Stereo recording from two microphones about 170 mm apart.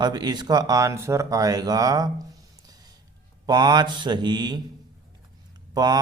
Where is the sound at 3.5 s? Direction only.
25° right (ahead or behind).